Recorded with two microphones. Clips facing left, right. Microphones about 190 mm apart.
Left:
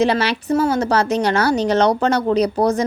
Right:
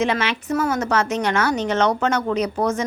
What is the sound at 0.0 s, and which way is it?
Speech, 35° left (ahead or behind).